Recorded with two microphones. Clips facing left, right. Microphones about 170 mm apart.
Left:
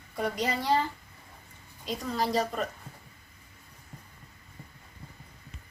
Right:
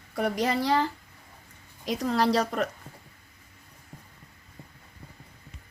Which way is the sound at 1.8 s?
85° right.